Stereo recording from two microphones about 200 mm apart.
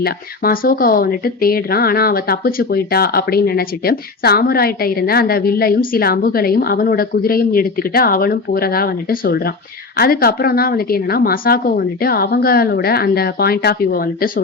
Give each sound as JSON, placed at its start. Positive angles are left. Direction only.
{"t": 0.0, "sound": "speech", "side_deg": 45}